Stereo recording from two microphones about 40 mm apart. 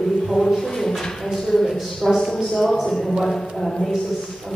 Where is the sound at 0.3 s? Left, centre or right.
Centre.